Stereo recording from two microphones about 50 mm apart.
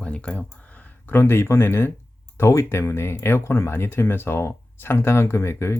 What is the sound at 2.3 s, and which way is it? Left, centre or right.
Speech, left.